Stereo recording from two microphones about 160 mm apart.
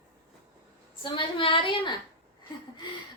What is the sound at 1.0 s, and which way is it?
A woman's voice, 30° left (ahead or behind).